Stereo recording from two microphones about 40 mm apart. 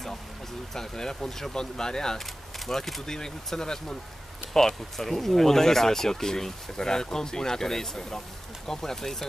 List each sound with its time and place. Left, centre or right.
0.7 s speech: centre
2.6 s speech: centre